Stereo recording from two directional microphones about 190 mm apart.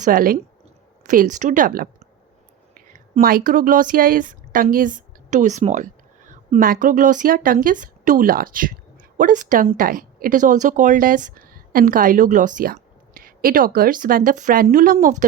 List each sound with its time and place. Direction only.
0.0 s speech: 45° right (ahead or behind)